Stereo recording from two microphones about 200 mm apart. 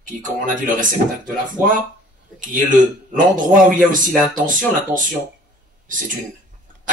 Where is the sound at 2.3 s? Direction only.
40° right (ahead or behind).